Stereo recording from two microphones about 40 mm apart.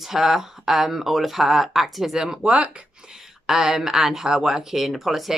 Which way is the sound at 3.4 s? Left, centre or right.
Centre.